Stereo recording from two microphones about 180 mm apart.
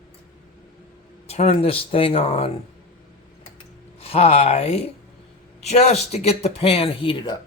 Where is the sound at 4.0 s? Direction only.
35° left (ahead or behind).